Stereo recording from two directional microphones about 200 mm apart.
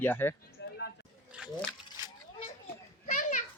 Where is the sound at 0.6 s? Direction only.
60° left (ahead or behind).